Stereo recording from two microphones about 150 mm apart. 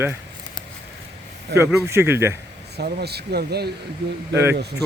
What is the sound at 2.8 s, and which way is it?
Speech, 90° right.